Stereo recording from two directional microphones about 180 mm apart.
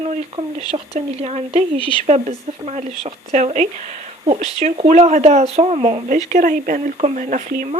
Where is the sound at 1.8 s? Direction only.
30° left (ahead or behind).